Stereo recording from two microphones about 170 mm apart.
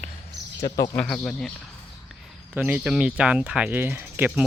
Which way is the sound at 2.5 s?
10° right (ahead or behind).